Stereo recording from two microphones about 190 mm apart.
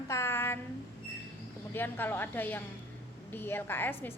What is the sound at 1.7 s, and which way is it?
A woman's voice, 10° left (ahead or behind).